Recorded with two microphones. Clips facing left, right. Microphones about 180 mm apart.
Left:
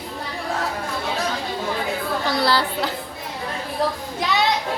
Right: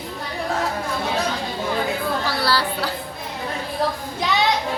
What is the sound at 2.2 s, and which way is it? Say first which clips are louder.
Speech: left 5 dB; 20° left (ahead or behind).